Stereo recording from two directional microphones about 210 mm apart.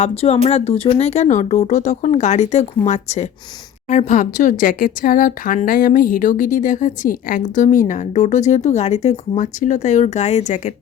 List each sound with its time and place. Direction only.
0.0 s speech: 30° left (ahead or behind)